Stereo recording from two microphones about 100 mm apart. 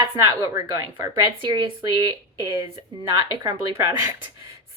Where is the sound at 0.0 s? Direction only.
35° right (ahead or behind).